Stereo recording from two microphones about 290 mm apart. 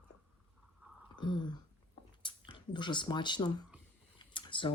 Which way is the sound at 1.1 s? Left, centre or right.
Centre.